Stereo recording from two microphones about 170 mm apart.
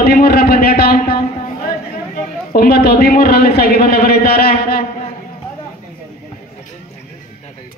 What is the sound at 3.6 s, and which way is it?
A man's voice, 65° left (ahead or behind).